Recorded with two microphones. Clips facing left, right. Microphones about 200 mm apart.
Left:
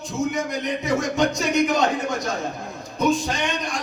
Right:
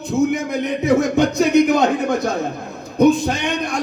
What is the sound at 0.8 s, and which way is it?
A man's voice, 60° right (ahead or behind).